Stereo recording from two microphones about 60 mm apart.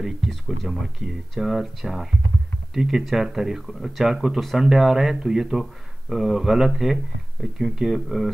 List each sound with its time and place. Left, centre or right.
0.0 s speech: centre